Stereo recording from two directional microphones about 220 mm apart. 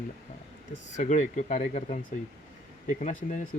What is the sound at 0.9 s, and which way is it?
Speech, 35° left (ahead or behind).